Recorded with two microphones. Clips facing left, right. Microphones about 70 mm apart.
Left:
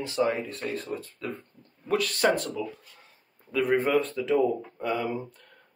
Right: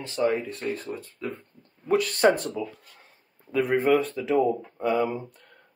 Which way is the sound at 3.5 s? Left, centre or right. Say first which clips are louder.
Right 2 dB; centre.